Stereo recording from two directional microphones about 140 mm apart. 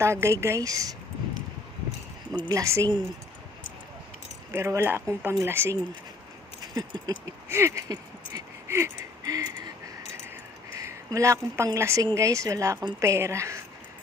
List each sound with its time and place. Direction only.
0.0 s a woman's voice: 20° right (ahead or behind)
2.5 s a woman's voice: 20° right (ahead or behind)
4.5 s speech: 20° right (ahead or behind)
6.7 s a woman's voice: 30° right (ahead or behind)
7.4 s a sound: 20° right (ahead or behind)
9.4 s a sound: 70° left (ahead or behind)
10.8 s a woman's voice: 20° right (ahead or behind)